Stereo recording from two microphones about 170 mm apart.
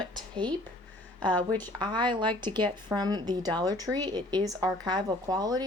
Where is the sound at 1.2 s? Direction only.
10° left (ahead or behind).